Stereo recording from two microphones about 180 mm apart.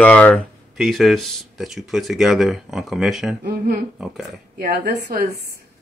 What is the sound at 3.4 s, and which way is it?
Speech, 60° right (ahead or behind).